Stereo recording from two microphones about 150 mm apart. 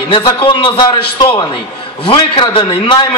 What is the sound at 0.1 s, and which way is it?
A man's voice, 35° left (ahead or behind).